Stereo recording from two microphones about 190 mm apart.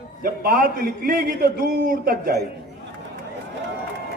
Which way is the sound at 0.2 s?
50° right (ahead or behind).